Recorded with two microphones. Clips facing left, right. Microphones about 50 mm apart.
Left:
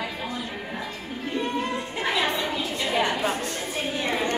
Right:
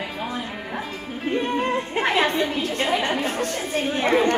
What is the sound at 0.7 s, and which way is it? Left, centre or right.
Music, right.